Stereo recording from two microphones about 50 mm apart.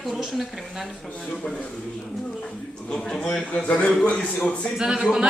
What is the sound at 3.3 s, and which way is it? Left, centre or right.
Speech, left.